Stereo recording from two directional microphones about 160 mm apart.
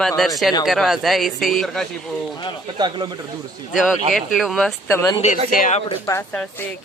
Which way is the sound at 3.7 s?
5° right (ahead or behind).